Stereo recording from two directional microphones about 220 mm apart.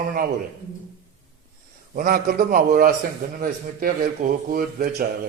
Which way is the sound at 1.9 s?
40° right (ahead or behind).